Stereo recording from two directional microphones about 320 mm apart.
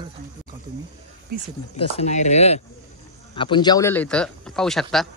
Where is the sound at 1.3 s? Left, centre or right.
Right.